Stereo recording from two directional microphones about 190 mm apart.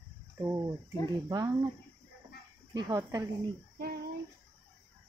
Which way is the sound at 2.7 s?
20° right (ahead or behind).